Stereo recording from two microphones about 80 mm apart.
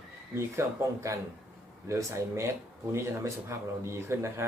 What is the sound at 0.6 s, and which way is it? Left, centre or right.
Speech, right.